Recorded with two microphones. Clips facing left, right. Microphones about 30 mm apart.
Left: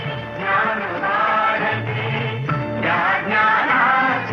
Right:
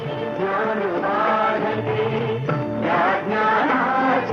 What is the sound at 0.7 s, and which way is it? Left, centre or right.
Music, centre.